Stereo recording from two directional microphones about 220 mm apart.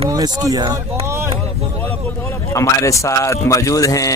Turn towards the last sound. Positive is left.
turn(degrees=15)  # may be behind; listen again after turning